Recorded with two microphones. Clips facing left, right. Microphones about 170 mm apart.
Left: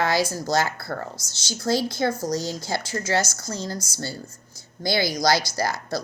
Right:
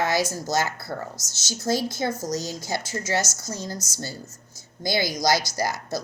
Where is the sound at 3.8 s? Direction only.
45° right (ahead or behind).